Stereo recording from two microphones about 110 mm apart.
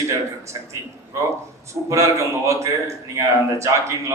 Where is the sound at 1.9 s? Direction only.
25° right (ahead or behind).